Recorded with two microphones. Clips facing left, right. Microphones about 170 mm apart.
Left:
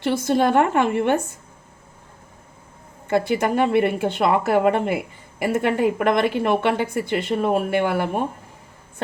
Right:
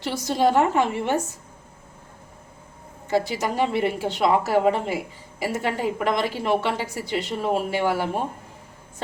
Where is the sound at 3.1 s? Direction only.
55° left (ahead or behind).